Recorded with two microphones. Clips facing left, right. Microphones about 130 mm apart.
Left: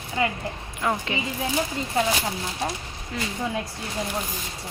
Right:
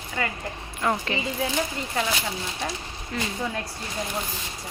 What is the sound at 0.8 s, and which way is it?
Speech, 10° left (ahead or behind).